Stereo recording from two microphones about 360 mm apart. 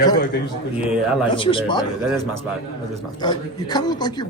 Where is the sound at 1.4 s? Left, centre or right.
Centre.